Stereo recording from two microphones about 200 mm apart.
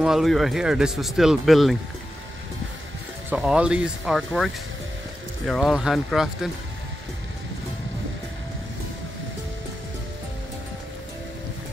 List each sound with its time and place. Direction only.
0.0 s speech: centre (ahead or behind)
3.3 s speech: 5° right (ahead or behind)